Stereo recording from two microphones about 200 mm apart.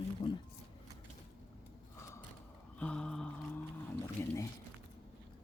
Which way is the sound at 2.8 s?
5° left (ahead or behind).